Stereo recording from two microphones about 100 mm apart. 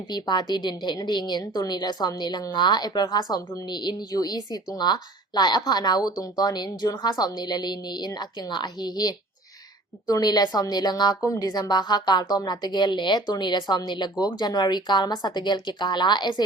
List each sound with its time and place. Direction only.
0.1 s a woman's voice: 45° left (ahead or behind)